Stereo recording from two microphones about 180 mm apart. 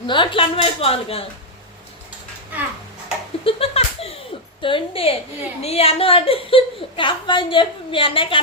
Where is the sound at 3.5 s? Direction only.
30° left (ahead or behind).